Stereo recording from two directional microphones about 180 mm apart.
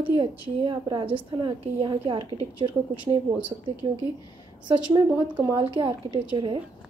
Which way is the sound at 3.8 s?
30° right (ahead or behind).